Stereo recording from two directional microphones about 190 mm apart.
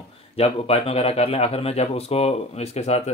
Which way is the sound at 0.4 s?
30° left (ahead or behind).